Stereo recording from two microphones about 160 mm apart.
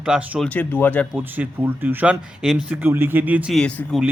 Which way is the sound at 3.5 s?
5° left (ahead or behind).